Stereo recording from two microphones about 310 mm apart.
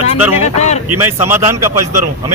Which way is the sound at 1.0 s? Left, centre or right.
Centre.